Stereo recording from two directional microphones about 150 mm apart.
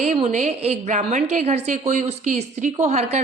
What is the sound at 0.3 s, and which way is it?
A man's voice, 50° right (ahead or behind).